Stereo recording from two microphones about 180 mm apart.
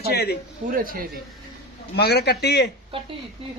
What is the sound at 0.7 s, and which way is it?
Speech, 50° right (ahead or behind).